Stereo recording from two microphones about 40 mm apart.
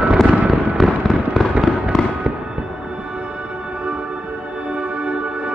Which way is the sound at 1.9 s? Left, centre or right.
Centre.